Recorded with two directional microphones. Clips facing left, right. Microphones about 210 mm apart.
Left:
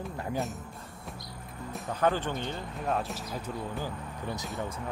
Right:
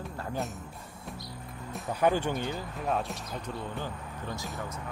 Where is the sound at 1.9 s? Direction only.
10° right (ahead or behind); by 4.4 s 10° left (ahead or behind).